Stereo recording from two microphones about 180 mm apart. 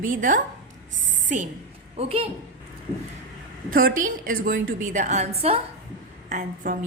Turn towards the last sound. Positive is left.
turn(degrees=-45)  # may be behind; listen again after turning